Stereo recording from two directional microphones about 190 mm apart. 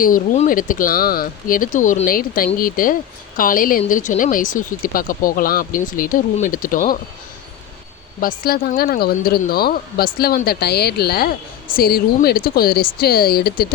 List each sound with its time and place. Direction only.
0.0 s speech: 45° left (ahead or behind)
8.2 s speech: 50° left (ahead or behind)